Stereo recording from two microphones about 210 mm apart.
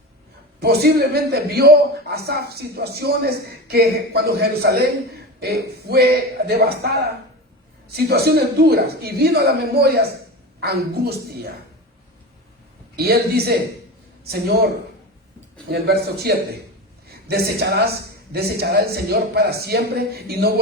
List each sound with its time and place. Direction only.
0.6 s a man's voice: 50° right (ahead or behind)
13.0 s a man's voice: 50° right (ahead or behind)
15.7 s a man's voice: 50° right (ahead or behind)